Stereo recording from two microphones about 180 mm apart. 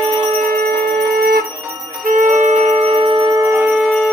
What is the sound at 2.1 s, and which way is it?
Music, 45° right (ahead or behind).